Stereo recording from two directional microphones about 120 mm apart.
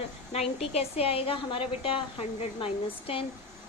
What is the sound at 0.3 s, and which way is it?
A woman's voice, 55° left (ahead or behind).